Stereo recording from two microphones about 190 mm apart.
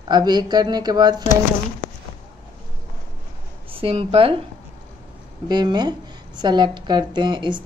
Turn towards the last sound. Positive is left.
turn(degrees=-25)  # may be behind; listen again after turning